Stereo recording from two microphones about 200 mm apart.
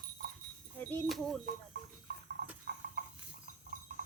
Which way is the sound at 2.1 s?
60° right (ahead or behind).